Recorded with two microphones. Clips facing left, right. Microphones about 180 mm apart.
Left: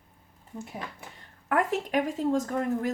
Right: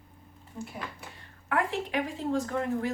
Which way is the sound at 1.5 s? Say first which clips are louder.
Left 3 dB; 45° left (ahead or behind).